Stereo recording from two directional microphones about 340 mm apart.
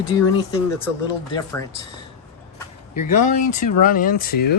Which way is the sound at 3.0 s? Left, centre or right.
Left.